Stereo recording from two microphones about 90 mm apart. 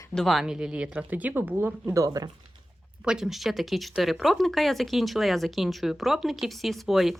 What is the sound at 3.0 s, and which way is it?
Speech, 5° right (ahead or behind).